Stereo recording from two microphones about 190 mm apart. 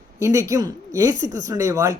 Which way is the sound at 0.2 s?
15° right (ahead or behind).